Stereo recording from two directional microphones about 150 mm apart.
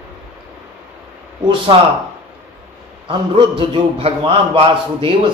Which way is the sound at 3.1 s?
35° right (ahead or behind).